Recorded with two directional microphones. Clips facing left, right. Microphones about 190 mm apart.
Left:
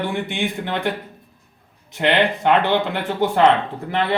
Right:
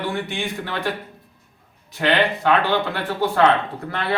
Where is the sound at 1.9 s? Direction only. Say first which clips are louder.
Left 1 dB; 20° left (ahead or behind).